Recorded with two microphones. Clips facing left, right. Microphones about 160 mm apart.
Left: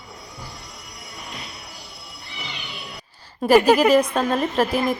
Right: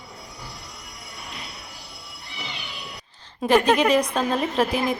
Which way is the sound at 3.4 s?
5° left (ahead or behind).